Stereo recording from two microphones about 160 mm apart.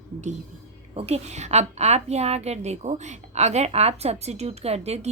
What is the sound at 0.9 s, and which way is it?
A woman's voice, 40° right (ahead or behind).